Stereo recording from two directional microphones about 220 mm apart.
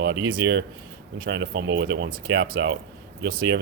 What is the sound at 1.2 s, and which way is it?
Speech, 50° right (ahead or behind).